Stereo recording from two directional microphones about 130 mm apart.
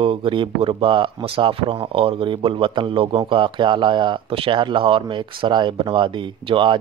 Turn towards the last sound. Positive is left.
turn(degrees=-40)  # may be behind; listen again after turning